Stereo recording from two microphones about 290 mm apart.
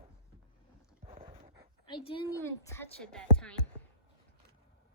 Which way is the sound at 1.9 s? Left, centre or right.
Centre.